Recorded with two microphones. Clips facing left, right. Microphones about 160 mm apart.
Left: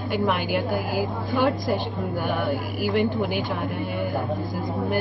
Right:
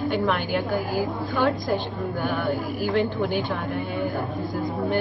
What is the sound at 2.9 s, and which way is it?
Speech, 15° left (ahead or behind).